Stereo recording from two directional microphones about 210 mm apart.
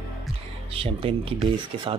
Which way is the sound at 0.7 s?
25° right (ahead or behind).